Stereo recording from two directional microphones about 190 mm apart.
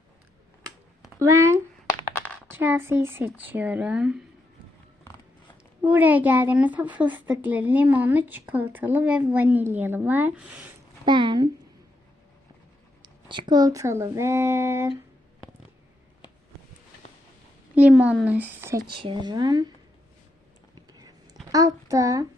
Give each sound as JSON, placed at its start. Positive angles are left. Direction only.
{"t": 1.2, "sound": "speech", "side_deg": -15}
{"t": 1.9, "sound": "a sound", "side_deg": 10}
{"t": 2.5, "sound": "speech", "side_deg": -10}
{"t": 5.8, "sound": "speech", "side_deg": -10}
{"t": 11.0, "sound": "speech", "side_deg": -25}
{"t": 13.0, "sound": "speech", "side_deg": -25}
{"t": 17.7, "sound": "speech", "side_deg": -5}
{"t": 18.9, "sound": "speech", "side_deg": -25}
{"t": 21.5, "sound": "speech", "side_deg": -20}